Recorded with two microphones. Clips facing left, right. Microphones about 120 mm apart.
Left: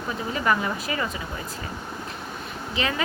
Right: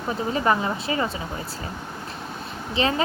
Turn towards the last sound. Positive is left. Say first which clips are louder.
# right 4 dB
turn(degrees=-30)  # may be behind; listen again after turning